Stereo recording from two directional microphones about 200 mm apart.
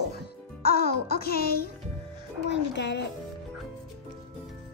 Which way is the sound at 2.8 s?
60° left (ahead or behind).